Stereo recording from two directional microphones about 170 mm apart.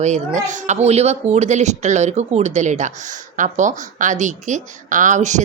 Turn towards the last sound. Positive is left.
turn(degrees=-45)  # may be behind; listen again after turning